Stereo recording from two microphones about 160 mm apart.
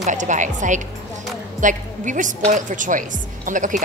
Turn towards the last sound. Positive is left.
turn(degrees=-55)  # may be behind; listen again after turning